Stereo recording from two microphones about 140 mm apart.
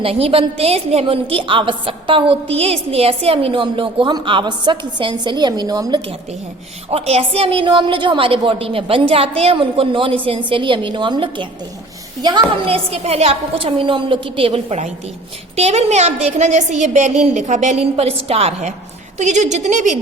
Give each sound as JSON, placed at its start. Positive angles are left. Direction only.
{"t": 0.0, "sound": "a woman's voice", "side_deg": -45}
{"t": 6.9, "sound": "a woman's voice", "side_deg": -45}
{"t": 19.2, "sound": "a woman's voice", "side_deg": -55}